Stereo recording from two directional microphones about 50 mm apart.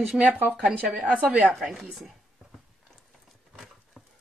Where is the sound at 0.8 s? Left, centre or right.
Right.